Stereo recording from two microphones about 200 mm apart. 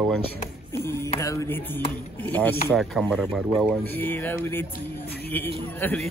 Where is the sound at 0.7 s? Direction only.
15° left (ahead or behind).